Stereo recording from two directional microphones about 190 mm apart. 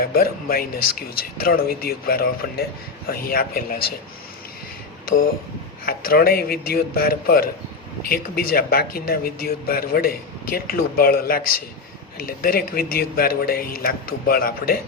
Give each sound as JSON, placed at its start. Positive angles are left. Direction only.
{"t": 0.0, "sound": "speech", "side_deg": 50}
{"t": 5.0, "sound": "speech", "side_deg": 50}